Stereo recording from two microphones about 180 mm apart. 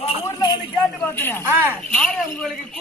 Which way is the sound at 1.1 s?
10° left (ahead or behind).